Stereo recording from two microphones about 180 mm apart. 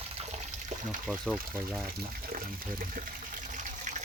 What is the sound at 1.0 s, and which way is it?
Speech, centre (ahead or behind).